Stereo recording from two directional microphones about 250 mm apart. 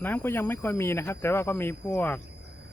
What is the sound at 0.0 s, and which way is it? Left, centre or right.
Speech, centre.